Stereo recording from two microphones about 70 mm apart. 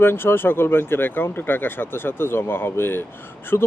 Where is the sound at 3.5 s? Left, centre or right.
Left.